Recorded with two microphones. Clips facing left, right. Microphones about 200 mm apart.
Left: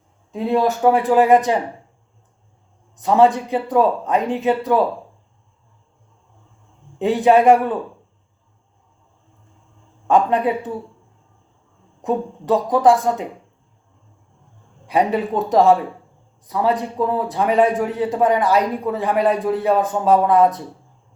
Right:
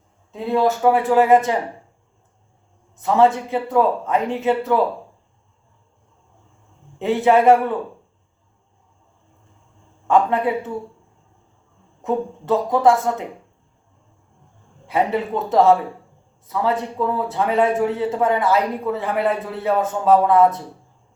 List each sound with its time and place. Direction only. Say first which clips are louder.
0.3 s a man's voice: left 1 dB; 20° left (ahead or behind)
2.9 s a man's voice: left 2 dB; 20° left (ahead or behind)
7.0 s a man's voice: left 1 dB; 20° left (ahead or behind)
10.1 s a man's voice: left 1 dB; 20° left (ahead or behind)
12.0 s a man's voice: left 1 dB; 15° left (ahead or behind)
14.8 s a man's voice: left 2 dB; 15° left (ahead or behind)